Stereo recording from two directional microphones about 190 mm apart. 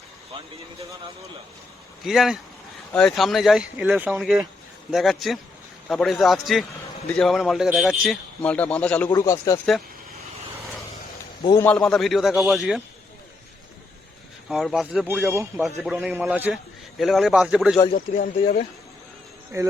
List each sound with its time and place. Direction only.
2.0 s a man's voice: centre (ahead or behind); by 9.6 s 20° left (ahead or behind)
11.6 s a man's voice: 5° left (ahead or behind)
14.5 s a man's voice: centre (ahead or behind)
17.9 s speech: 45° left (ahead or behind)
19.5 s a man's voice: 15° right (ahead or behind)